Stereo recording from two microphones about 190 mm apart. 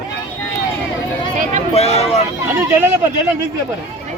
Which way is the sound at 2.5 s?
10° right (ahead or behind).